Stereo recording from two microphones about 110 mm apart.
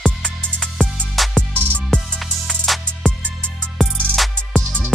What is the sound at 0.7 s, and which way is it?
Music, centre (ahead or behind).